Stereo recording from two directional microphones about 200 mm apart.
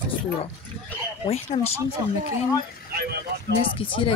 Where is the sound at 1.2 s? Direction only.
30° left (ahead or behind).